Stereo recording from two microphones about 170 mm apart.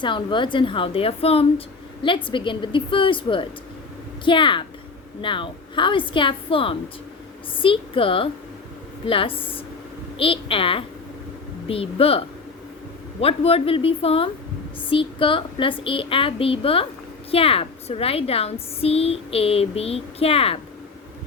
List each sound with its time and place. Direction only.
0.0 s a woman's voice: 30° left (ahead or behind)